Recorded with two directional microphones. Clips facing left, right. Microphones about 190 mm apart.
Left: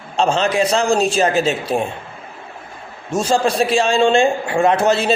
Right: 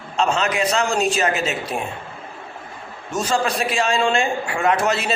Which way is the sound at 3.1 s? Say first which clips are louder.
Left 4 dB; 30° left (ahead or behind).